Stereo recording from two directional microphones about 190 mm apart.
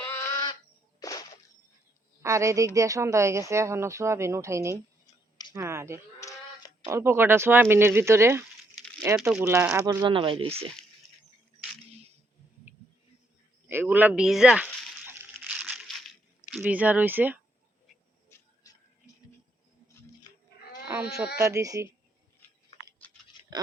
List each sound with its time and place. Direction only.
0.0 s bird: 10° left (ahead or behind)
0.9 s music: 20° left (ahead or behind)
2.2 s speech: 15° right (ahead or behind)
6.1 s a sound: 15° left (ahead or behind)
6.8 s speech: 15° right (ahead or behind)
9.1 s speech: 5° right (ahead or behind)
9.4 s speech: 15° right (ahead or behind); by 10.7 s 30° right (ahead or behind)
13.7 s speech: 10° right (ahead or behind)
15.0 s crumpling: 10° right (ahead or behind)
18.3 s a sound: 15° left (ahead or behind)
20.8 s sheep: 5° right (ahead or behind)
21.3 s speech: 15° right (ahead or behind)
23.3 s writing: 25° left (ahead or behind)